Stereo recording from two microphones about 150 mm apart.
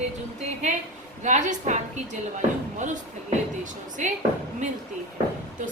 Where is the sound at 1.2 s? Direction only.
55° right (ahead or behind).